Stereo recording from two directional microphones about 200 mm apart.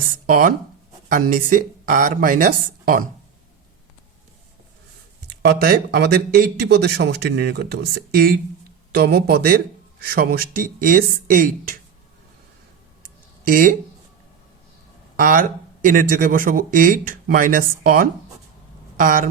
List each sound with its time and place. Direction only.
0.3 s speech: 45° right (ahead or behind)
5.4 s speech: 50° right (ahead or behind)
13.0 s a sound: 45° right (ahead or behind)
15.1 s speech: 45° right (ahead or behind)